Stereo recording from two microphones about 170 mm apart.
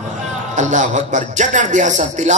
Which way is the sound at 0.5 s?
45° right (ahead or behind).